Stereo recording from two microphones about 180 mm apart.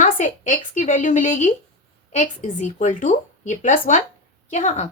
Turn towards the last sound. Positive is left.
turn(degrees=40)  # may be behind; listen again after turning